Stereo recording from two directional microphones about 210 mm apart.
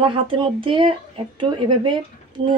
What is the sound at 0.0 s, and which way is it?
Speech, 25° right (ahead or behind).